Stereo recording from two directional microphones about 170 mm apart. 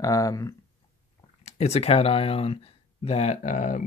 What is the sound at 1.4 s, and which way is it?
Speech, 40° left (ahead or behind).